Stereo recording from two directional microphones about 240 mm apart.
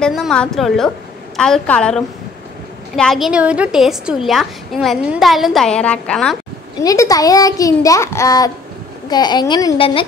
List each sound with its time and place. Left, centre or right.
0.0 s a woman's voice: centre
6.8 s a child's voice: centre